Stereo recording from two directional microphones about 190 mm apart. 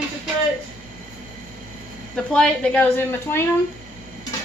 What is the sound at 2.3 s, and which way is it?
A woman's voice, 5° left (ahead or behind).